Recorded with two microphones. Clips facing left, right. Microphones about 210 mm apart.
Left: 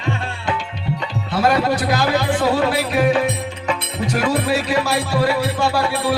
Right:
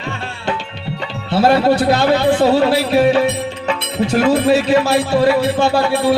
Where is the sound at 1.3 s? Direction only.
30° right (ahead or behind).